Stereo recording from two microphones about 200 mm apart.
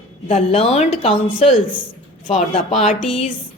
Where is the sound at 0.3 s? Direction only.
30° left (ahead or behind).